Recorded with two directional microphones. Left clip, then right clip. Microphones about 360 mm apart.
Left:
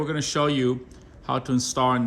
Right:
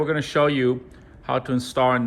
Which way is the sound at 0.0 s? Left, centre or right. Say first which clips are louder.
Right 4 dB; centre.